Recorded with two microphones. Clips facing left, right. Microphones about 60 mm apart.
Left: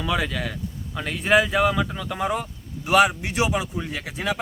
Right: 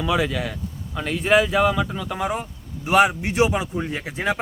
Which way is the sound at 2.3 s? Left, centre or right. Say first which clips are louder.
Even; right.